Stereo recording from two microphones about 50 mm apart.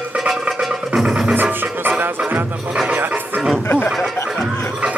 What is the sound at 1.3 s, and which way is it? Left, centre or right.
Music, right.